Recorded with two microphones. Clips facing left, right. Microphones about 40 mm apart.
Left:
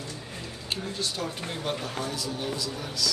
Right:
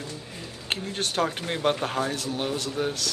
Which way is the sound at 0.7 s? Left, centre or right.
Right.